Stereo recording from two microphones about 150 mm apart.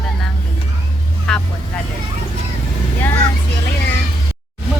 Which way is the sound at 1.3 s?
5° left (ahead or behind).